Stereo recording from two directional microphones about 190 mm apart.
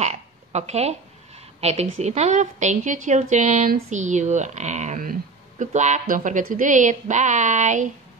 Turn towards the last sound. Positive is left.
turn(degrees=-40)  # may be behind; listen again after turning